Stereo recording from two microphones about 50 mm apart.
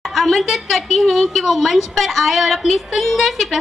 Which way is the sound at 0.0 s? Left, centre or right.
Centre.